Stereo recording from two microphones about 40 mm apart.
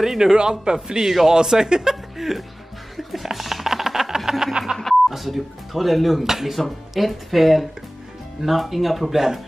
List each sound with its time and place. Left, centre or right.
0.0 s speech: centre
3.0 s music: centre
5.1 s speech: centre